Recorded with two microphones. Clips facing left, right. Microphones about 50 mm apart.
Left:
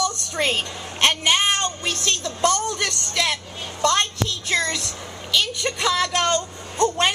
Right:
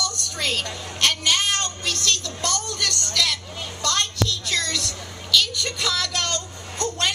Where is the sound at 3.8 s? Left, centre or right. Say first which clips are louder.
Left 4 dB; left.